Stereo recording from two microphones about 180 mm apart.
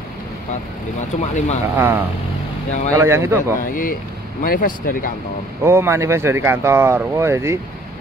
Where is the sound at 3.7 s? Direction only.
50° left (ahead or behind).